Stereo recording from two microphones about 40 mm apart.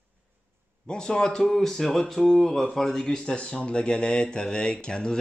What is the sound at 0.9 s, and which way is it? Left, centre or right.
Speech, centre.